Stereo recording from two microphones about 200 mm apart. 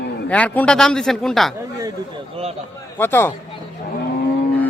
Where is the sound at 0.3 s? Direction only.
5° left (ahead or behind).